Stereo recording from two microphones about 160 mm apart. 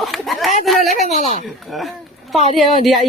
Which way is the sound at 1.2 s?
50° left (ahead or behind).